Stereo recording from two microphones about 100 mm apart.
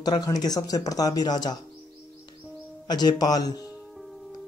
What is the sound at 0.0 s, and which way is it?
A man's voice, 40° left (ahead or behind).